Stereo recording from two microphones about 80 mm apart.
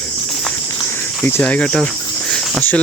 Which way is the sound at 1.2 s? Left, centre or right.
Left.